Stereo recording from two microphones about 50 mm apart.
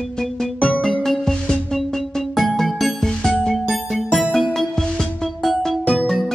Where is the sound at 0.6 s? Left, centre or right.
Left.